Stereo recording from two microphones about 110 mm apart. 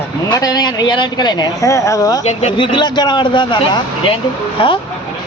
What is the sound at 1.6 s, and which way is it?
Speech, 30° left (ahead or behind).